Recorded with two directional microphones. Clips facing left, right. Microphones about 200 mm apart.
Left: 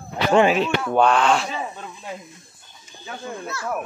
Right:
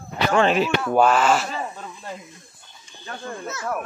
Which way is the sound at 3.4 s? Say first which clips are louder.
Even; 20° right (ahead or behind).